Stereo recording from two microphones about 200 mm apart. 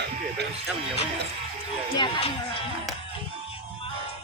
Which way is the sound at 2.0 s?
25° left (ahead or behind).